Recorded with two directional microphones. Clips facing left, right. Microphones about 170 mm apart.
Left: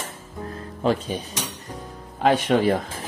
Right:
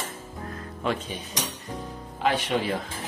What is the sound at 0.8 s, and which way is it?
Speech, 35° left (ahead or behind).